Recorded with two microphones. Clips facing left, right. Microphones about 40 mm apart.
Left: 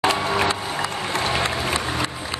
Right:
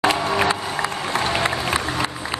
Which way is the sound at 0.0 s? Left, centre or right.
Centre.